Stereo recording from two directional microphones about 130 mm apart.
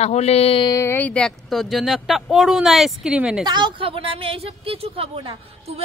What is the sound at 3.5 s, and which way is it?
Speech, 35° right (ahead or behind).